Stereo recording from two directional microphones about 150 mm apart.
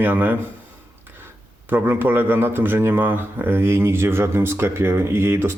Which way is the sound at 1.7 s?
15° right (ahead or behind).